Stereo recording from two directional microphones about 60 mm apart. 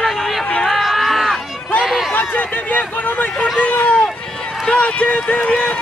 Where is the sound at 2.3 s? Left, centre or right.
Left.